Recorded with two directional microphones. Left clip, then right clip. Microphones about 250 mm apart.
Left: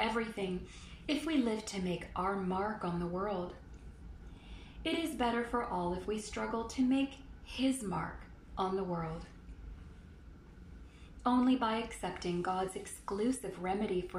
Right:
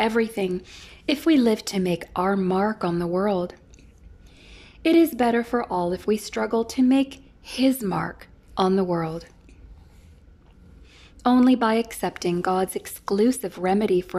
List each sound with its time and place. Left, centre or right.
0.1 s speech: right
4.8 s speech: right
11.2 s speech: right